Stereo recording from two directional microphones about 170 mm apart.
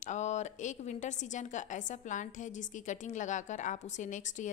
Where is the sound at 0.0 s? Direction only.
45° left (ahead or behind).